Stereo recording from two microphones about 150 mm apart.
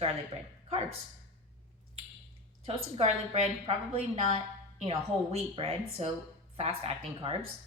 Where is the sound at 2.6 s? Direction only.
40° right (ahead or behind).